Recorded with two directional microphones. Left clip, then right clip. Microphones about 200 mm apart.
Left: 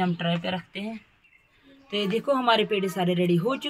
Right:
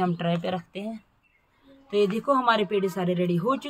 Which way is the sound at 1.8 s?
20° left (ahead or behind).